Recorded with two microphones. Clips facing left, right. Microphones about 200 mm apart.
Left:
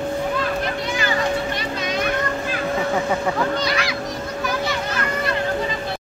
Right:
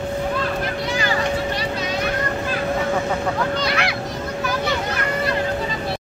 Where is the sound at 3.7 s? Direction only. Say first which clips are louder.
Right 1 dB; 60° right (ahead or behind).